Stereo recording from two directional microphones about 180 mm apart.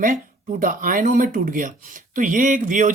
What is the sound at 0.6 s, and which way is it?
Speech, 50° right (ahead or behind).